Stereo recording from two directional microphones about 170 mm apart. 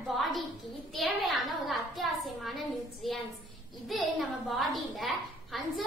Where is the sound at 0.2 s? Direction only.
Centre (ahead or behind).